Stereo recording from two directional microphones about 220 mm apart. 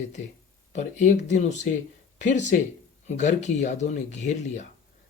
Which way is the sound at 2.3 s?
35° left (ahead or behind).